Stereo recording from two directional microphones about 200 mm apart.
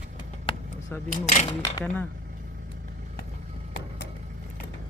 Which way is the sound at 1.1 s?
35° left (ahead or behind).